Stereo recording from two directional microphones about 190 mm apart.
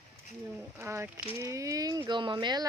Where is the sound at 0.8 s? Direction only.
15° right (ahead or behind).